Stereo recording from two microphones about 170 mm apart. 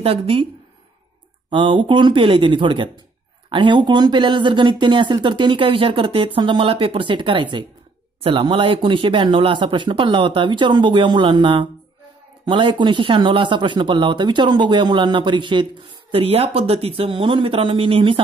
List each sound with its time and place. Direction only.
0.0 s a woman's voice: 35° right (ahead or behind)
1.5 s speech: 30° right (ahead or behind)